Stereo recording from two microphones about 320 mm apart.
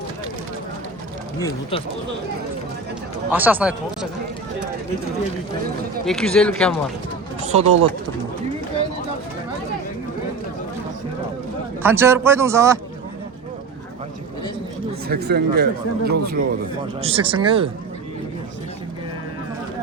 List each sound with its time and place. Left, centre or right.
1.4 s speech: centre
3.3 s speech: centre
6.1 s speech: centre
7.4 s speech: right
11.8 s speech: centre
15.0 s speech: right
17.0 s speech: centre